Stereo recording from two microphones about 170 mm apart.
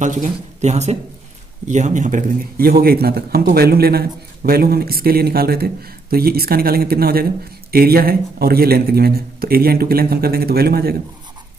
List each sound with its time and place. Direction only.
0.0 s a man's voice: 45° right (ahead or behind); by 11.0 s 65° right (ahead or behind)